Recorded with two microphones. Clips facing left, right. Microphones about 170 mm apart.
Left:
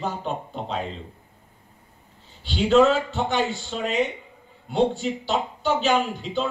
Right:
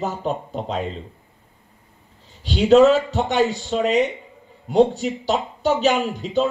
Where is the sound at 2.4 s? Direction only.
40° right (ahead or behind).